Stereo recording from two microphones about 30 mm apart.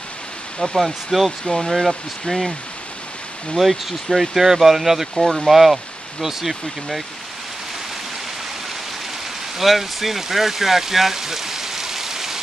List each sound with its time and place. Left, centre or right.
0.6 s speech: centre
1.4 s speech: centre
1.7 s speech: centre
3.5 s speech: centre
9.6 s speech: centre